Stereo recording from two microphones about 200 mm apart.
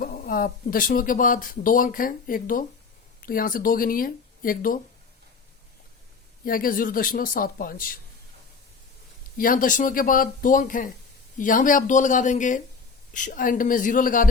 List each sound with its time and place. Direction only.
0.0 s speech: 50° left (ahead or behind)
6.4 s speech: 45° left (ahead or behind)
9.4 s speech: 45° left (ahead or behind)